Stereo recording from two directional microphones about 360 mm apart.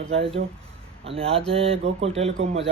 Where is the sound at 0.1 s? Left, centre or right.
Centre.